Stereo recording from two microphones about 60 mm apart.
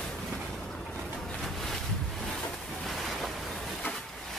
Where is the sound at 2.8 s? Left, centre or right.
Centre.